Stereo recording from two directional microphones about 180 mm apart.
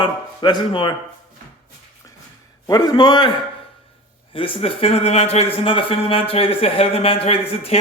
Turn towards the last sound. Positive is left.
turn(degrees=35)  # may be behind; listen again after turning